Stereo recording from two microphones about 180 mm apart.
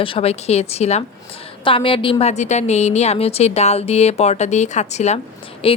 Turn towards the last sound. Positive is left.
turn(degrees=30)  # may be behind; listen again after turning